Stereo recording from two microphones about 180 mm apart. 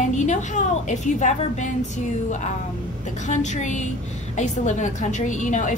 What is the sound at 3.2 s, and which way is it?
A woman's voice, 40° left (ahead or behind).